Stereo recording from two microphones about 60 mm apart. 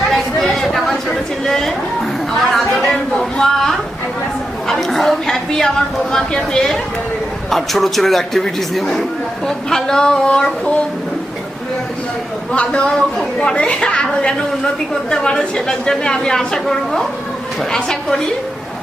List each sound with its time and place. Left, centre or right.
0.1 s chatter: centre
3.2 s a sound: centre
7.5 s a woman's voice: centre
12.5 s a woman's voice: centre